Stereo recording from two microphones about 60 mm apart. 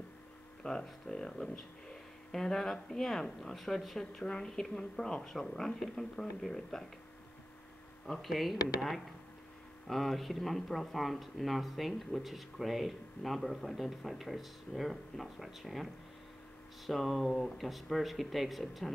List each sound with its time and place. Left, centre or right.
0.6 s speech: centre
8.1 s speech: centre
9.8 s speech: centre